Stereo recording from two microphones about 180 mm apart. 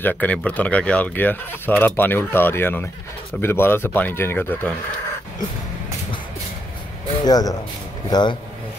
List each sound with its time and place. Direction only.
0.0 s speech: 10° left (ahead or behind)
7.2 s speech: 20° left (ahead or behind)